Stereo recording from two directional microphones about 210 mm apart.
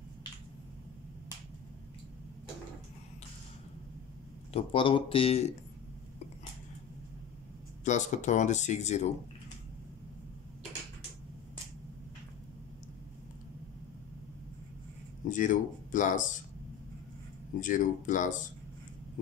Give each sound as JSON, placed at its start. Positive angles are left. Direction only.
{"t": 4.5, "sound": "speech", "side_deg": 25}
{"t": 7.8, "sound": "speech", "side_deg": 35}
{"t": 15.2, "sound": "speech", "side_deg": 40}
{"t": 17.6, "sound": "speech", "side_deg": 40}